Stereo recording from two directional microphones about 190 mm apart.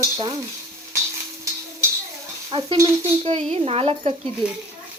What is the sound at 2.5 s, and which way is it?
A woman's voice, 25° right (ahead or behind).